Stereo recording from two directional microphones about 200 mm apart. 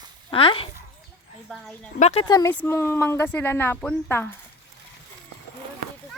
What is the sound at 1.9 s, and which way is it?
Speech, 35° left (ahead or behind).